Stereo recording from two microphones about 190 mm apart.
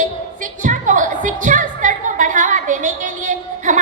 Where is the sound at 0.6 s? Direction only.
40° right (ahead or behind).